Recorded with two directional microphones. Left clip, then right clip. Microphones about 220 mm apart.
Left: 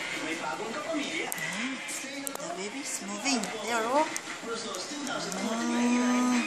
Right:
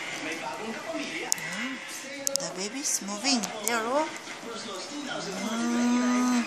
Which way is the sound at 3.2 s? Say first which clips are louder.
Right 1 dB; 20° right (ahead or behind).